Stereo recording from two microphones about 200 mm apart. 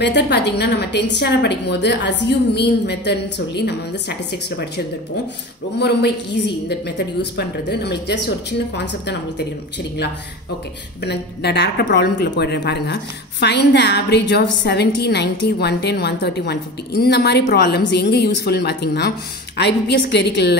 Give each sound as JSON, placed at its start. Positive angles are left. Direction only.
{"t": 0.0, "sound": "a woman's voice", "side_deg": 60}
{"t": 11.1, "sound": "a woman's voice", "side_deg": 55}